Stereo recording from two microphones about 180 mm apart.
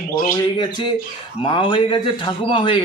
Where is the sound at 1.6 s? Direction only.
25° left (ahead or behind).